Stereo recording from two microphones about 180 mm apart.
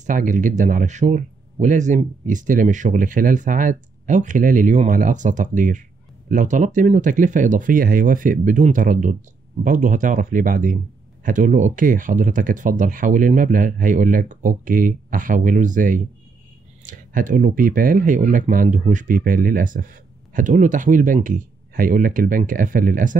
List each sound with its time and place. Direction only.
0.0 s speech: 45° right (ahead or behind)